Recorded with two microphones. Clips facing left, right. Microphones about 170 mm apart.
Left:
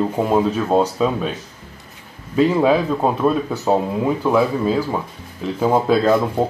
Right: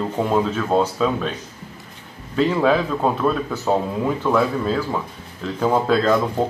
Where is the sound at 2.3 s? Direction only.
10° left (ahead or behind).